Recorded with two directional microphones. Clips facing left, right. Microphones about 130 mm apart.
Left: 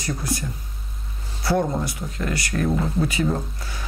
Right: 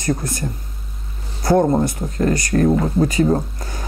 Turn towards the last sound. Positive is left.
turn(degrees=-45)  # may be behind; listen again after turning